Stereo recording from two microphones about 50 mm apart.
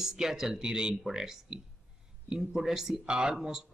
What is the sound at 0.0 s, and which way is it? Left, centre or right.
Speech, centre.